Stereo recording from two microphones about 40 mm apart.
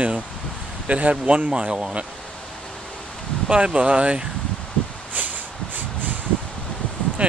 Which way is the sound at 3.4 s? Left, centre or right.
Right.